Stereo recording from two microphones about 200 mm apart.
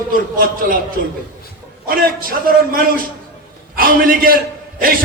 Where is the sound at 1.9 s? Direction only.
45° right (ahead or behind).